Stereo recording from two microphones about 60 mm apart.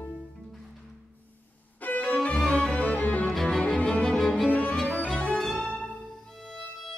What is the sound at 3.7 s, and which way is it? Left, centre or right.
Music, centre.